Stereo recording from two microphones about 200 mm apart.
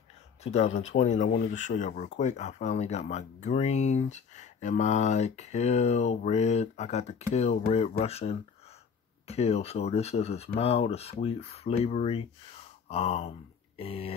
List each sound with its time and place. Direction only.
0.4 s speech: 35° left (ahead or behind)